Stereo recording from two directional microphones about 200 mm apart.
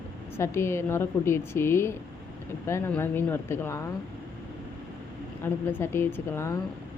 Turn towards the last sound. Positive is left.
turn(degrees=10)  # may be behind; listen again after turning